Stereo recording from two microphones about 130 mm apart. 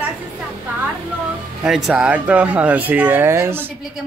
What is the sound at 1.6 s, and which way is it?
Speech, 5° right (ahead or behind).